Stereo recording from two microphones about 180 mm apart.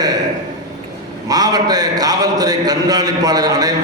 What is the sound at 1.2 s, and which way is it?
A man's voice, 20° right (ahead or behind).